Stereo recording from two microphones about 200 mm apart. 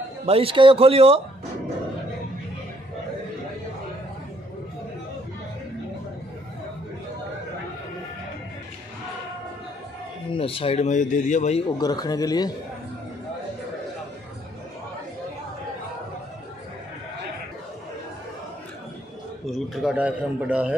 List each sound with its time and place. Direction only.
0.2 s speech: 30° right (ahead or behind)
10.3 s speech: 25° left (ahead or behind)
11.8 s speech: 20° left (ahead or behind)
19.4 s a man's voice: centre (ahead or behind)